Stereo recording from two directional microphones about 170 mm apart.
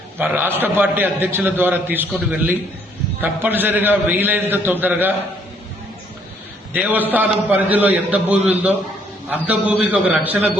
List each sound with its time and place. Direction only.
0.2 s a man's voice: 10° right (ahead or behind)
6.7 s a man's voice: 10° right (ahead or behind)